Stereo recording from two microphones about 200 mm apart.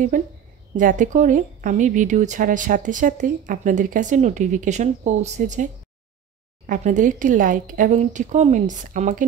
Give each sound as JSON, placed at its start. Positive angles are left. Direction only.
{"t": 0.1, "sound": "a woman's voice", "side_deg": -40}